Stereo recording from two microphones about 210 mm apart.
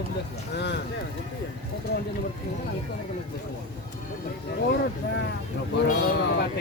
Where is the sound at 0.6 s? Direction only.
55° left (ahead or behind).